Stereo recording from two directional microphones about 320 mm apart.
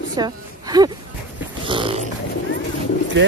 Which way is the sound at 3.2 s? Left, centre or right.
Right.